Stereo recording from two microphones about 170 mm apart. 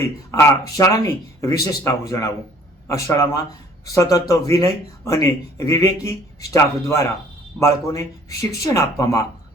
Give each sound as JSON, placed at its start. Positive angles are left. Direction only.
{"t": 0.3, "sound": "speech", "side_deg": 15}